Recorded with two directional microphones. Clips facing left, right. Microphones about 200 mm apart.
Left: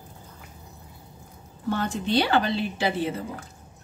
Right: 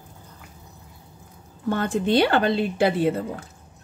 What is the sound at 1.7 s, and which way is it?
A woman's voice, 55° right (ahead or behind).